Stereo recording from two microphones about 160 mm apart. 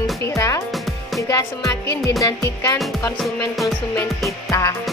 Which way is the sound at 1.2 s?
20° left (ahead or behind).